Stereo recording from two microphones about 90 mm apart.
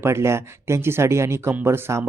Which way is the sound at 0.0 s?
30° right (ahead or behind).